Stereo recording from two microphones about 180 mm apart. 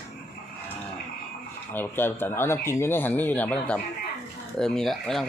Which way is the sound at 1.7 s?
10° left (ahead or behind).